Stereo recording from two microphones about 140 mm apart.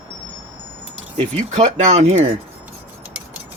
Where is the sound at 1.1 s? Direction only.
50° right (ahead or behind).